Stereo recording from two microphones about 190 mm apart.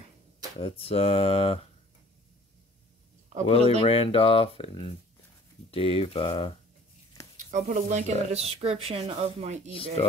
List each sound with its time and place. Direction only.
0.6 s speech: 30° left (ahead or behind)
3.4 s speech: 30° left (ahead or behind)
7.5 s speech: 40° right (ahead or behind)